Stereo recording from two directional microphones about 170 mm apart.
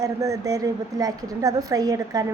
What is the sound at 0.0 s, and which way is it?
A woman's voice, 20° right (ahead or behind).